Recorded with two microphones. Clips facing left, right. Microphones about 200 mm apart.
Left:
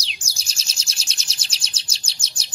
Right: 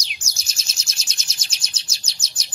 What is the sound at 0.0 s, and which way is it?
Bird, 30° left (ahead or behind).